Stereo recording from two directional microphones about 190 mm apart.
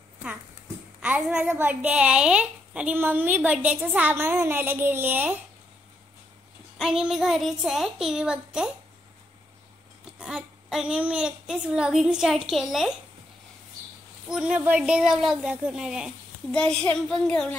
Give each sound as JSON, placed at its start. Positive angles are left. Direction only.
{"t": 1.0, "sound": "a woman's voice", "side_deg": -5}
{"t": 6.8, "sound": "a woman's voice", "side_deg": -5}
{"t": 10.1, "sound": "a woman's voice", "side_deg": -5}
{"t": 14.3, "sound": "a woman's voice", "side_deg": -5}